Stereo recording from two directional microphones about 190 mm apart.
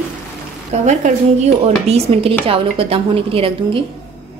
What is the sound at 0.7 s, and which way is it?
A woman's voice, 35° right (ahead or behind).